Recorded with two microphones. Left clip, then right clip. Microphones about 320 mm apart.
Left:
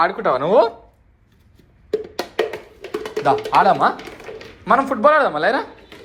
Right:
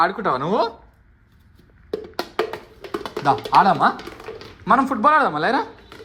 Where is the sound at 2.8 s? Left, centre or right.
Centre.